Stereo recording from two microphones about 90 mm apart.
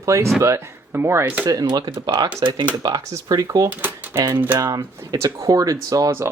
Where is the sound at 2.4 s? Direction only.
60° right (ahead or behind).